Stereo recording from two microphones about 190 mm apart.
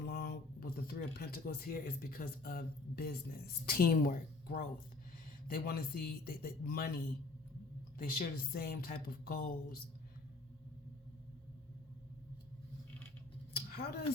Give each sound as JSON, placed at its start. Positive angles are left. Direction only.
{"t": 0.0, "sound": "speech", "side_deg": 55}
{"t": 7.9, "sound": "speech", "side_deg": 50}
{"t": 13.5, "sound": "a sound", "side_deg": 55}